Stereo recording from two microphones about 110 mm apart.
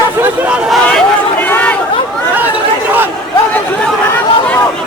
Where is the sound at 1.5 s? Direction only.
15° left (ahead or behind).